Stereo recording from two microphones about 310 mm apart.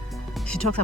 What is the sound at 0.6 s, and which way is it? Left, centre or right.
Speech, left.